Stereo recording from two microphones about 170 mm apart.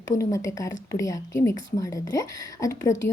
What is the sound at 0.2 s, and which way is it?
Speech, 20° left (ahead or behind).